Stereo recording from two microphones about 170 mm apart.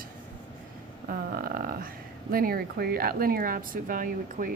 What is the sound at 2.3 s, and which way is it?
Speech, 60° right (ahead or behind).